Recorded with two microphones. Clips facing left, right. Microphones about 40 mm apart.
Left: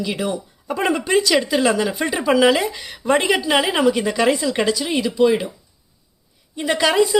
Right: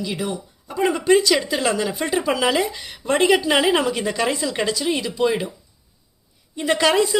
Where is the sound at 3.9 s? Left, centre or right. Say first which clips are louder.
Left 5 dB; left.